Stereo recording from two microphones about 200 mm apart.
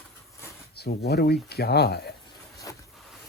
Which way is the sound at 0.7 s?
55° left (ahead or behind).